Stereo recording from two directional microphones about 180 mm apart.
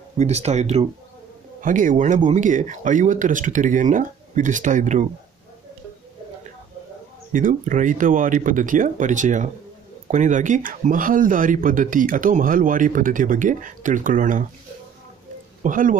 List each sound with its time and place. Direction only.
0.2 s speech: 35° right (ahead or behind)
7.3 s speech: 45° right (ahead or behind)
15.6 s speech: 45° right (ahead or behind)